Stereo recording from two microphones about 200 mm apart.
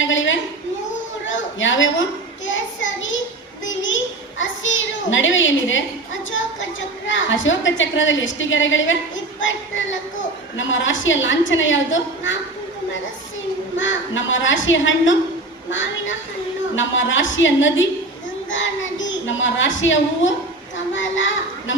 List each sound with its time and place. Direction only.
0.0 s a sound: 70° left (ahead or behind)
1.3 s a woman's voice: 70° left (ahead or behind)
2.5 s child singing: 70° left (ahead or behind)
3.7 s a sound: 70° left (ahead or behind)
7.1 s a woman's voice: 70° left (ahead or behind)
13.7 s a woman's voice: 70° left (ahead or behind)